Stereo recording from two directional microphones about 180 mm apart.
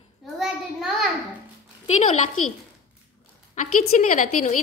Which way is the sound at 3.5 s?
45° left (ahead or behind).